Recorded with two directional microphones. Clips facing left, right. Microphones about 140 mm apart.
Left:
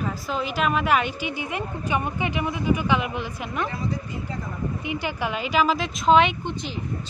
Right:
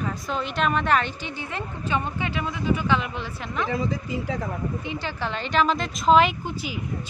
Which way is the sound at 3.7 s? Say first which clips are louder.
Right 3 dB; 90° right.